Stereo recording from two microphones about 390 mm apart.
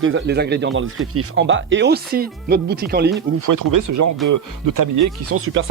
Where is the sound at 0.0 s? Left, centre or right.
Right.